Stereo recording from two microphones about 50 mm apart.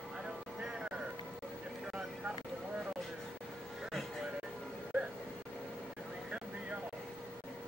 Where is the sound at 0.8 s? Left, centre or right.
Right.